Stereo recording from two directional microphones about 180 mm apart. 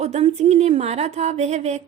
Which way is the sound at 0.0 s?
40° right (ahead or behind).